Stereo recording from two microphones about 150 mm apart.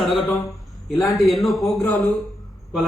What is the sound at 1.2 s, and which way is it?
Speech, centre (ahead or behind).